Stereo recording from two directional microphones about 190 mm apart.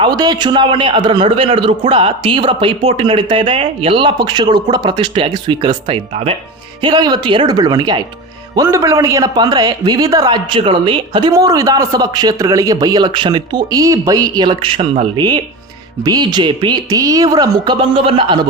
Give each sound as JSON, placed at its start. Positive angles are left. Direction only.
{"t": 0.0, "sound": "a man's voice", "side_deg": -20}